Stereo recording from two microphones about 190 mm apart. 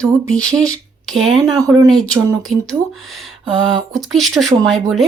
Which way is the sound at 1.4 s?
20° right (ahead or behind).